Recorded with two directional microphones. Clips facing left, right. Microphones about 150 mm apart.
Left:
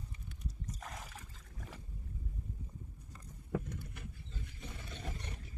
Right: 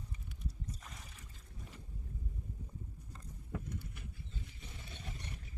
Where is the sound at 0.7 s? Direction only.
90° left.